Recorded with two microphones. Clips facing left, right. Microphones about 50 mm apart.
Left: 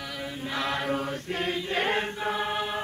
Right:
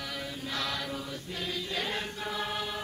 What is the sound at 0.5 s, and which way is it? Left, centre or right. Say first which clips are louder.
Chant: left 5 dB; left.